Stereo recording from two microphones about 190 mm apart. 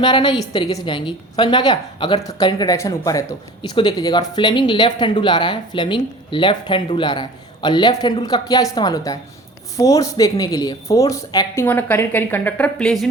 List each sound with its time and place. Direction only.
0.0 s a woman's voice: 25° left (ahead or behind); by 13.1 s 5° left (ahead or behind)